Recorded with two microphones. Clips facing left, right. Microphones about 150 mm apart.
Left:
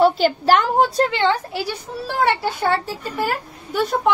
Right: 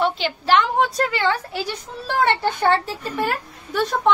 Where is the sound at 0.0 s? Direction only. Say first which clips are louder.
Left 7 dB; 40° left (ahead or behind).